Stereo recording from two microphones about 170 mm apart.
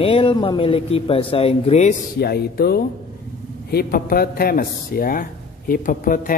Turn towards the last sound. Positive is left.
turn(degrees=55)  # may be behind; listen again after turning